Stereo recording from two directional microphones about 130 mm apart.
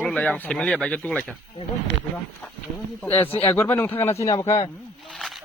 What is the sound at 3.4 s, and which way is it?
A man's voice, 15° left (ahead or behind).